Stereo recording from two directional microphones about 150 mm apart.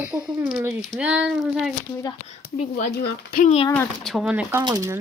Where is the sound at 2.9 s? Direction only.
85° left.